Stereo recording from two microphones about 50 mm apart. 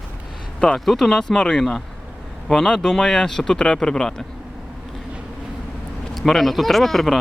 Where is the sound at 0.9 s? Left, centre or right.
Centre.